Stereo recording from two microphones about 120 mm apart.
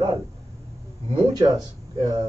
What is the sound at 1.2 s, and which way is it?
A man's voice, 35° right (ahead or behind).